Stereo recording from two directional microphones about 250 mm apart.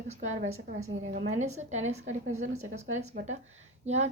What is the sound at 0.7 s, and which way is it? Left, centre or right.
A woman's voice, right.